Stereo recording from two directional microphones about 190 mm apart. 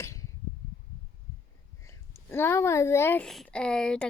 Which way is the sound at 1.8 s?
15° left (ahead or behind).